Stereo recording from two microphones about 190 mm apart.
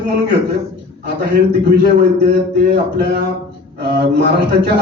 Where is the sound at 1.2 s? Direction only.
60° right (ahead or behind).